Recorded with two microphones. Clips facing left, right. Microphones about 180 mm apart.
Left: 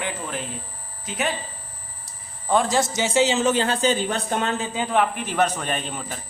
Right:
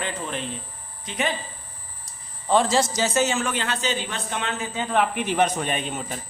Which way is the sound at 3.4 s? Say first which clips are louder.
Left 6 dB; 30° left (ahead or behind).